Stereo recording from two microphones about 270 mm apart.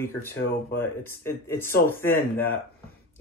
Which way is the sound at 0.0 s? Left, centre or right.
Centre.